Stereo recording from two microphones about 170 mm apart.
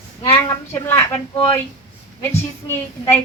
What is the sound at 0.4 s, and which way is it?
A woman's voice, 15° left (ahead or behind).